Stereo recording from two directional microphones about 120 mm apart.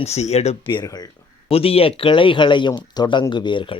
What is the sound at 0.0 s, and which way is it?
Speech, 65° left (ahead or behind).